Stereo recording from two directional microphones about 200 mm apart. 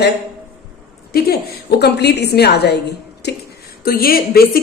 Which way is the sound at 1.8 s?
55° left (ahead or behind).